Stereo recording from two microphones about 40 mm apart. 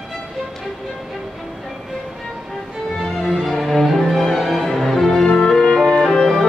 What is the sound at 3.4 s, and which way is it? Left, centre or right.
Music, centre.